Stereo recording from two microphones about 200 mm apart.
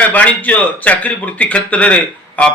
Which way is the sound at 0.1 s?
10° left (ahead or behind).